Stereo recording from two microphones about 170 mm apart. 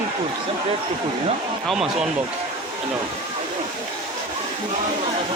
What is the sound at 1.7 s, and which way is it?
Speech, 5° right (ahead or behind).